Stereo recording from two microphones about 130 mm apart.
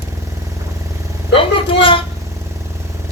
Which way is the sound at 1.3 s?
40° left (ahead or behind).